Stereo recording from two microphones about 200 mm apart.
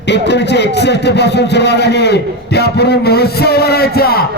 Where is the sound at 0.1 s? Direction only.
60° left (ahead or behind).